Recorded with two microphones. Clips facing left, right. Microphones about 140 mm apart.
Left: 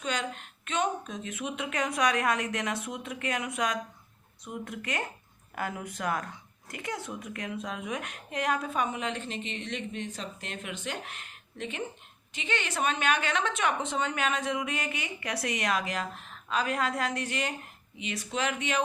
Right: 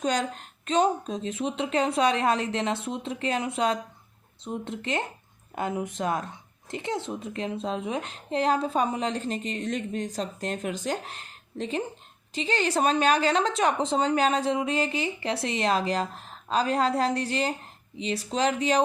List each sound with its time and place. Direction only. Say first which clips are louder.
0.0 s a woman's voice: right 6 dB; 40° right (ahead or behind)